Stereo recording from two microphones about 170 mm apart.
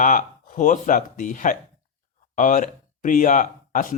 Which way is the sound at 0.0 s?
50° left (ahead or behind).